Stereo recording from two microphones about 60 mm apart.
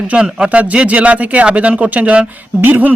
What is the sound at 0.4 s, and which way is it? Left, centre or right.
A man's voice, right.